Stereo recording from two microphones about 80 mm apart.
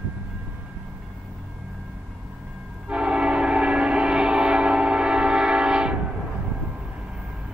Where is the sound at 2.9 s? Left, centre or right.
Centre.